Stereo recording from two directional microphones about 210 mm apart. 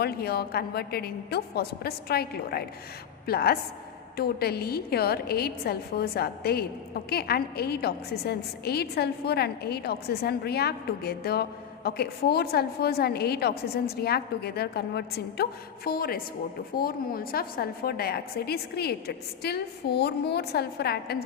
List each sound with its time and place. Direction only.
0.0 s a woman's voice: 50° left (ahead or behind)